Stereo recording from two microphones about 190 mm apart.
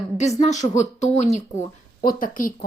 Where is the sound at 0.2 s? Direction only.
35° left (ahead or behind).